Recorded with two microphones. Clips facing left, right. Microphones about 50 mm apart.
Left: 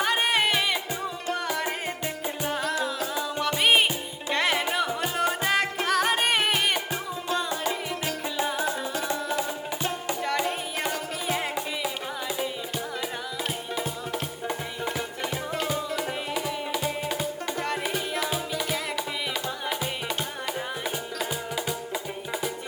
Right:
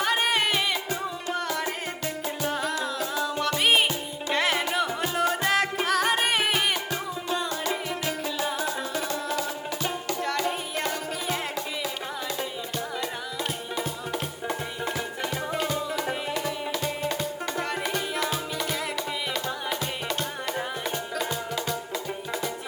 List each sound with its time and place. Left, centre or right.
0.0 s music: centre
1.6 s music: left
2.5 s music: centre
8.0 s music: left